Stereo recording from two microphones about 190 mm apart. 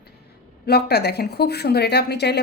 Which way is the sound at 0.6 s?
60° left (ahead or behind).